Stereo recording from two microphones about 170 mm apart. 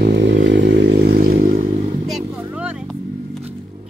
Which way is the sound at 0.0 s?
85° right.